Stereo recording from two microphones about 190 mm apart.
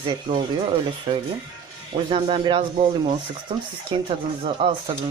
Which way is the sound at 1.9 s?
25° right (ahead or behind).